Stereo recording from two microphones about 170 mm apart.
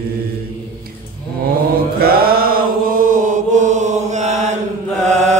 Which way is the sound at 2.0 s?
65° right (ahead or behind).